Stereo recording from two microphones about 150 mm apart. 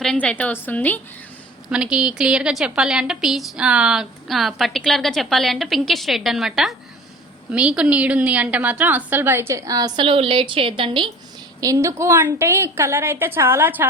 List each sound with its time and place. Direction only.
0.0 s a woman's voice: 5° left (ahead or behind)
1.7 s a woman's voice: 5° right (ahead or behind); by 11.1 s 35° right (ahead or behind)
11.6 s a woman's voice: 20° right (ahead or behind)